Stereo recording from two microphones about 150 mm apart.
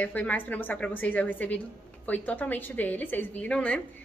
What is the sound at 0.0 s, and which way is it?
A woman's voice, 10° left (ahead or behind).